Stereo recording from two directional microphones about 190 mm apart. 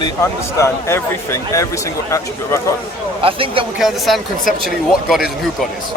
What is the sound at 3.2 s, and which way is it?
Speech, 30° right (ahead or behind).